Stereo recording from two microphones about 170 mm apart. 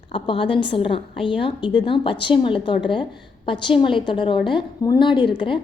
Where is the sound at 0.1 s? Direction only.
30° left (ahead or behind).